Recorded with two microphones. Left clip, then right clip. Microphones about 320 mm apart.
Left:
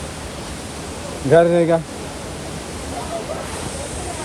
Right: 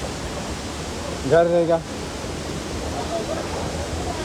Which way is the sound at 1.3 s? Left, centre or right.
Left.